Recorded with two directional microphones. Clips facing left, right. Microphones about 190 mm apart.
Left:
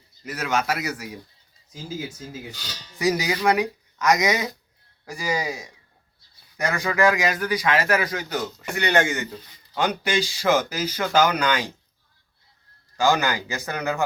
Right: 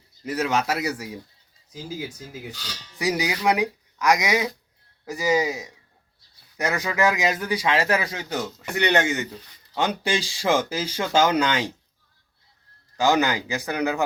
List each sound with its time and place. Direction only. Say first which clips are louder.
0.3 s speech: right 1 dB; 30° right (ahead or behind)
3.0 s speech: left 2 dB; 15° right (ahead or behind)
5.0 s speech: right 5 dB; 20° right (ahead or behind)
13.0 s speech: right 1 dB; 20° right (ahead or behind)